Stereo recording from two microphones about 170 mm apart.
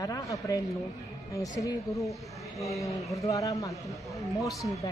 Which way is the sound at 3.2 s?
20° left (ahead or behind).